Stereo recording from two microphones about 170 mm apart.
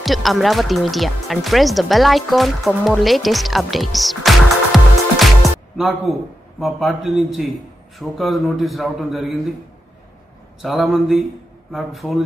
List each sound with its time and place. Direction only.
0.0 s a man's voice: centre (ahead or behind)
10.6 s a man's voice: centre (ahead or behind)